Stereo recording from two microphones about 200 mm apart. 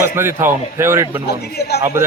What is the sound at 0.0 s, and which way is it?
A man's voice, 10° right (ahead or behind).